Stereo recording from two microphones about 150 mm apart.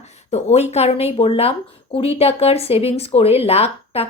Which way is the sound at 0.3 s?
45° left (ahead or behind).